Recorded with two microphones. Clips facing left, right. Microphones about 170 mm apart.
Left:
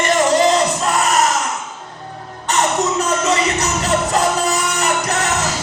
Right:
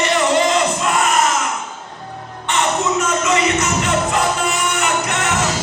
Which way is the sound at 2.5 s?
40° left (ahead or behind).